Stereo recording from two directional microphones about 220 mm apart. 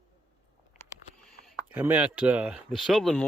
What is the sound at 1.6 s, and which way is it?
A man's voice, 10° right (ahead or behind).